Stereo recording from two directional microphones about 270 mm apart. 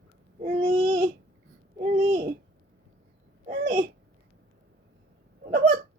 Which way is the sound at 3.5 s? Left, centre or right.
Right.